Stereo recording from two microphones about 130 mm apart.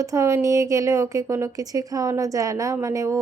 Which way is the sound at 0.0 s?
25° right (ahead or behind).